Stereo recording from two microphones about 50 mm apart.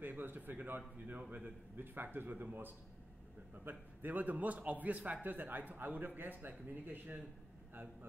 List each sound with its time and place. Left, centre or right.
0.0 s a man's voice: right